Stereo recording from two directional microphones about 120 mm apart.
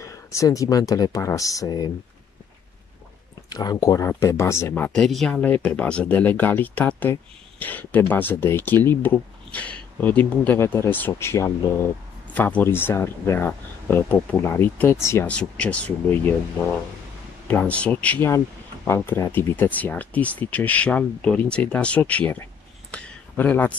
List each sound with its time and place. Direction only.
0.0 s speech: 25° left (ahead or behind)
3.4 s speech: 35° left (ahead or behind); by 5.0 s 15° left (ahead or behind)
5.0 s speech: 5° left (ahead or behind); by 11.9 s 20° left (ahead or behind)
12.4 s speech: 10° left (ahead or behind)
15.2 s speech: 10° left (ahead or behind)
17.5 s speech: 10° left (ahead or behind)
22.8 s a sound: 10° left (ahead or behind)